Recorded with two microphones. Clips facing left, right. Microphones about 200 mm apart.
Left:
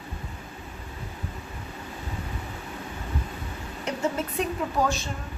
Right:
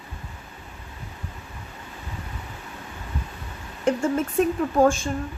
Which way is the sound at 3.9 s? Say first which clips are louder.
Right 6 dB; 50° right (ahead or behind).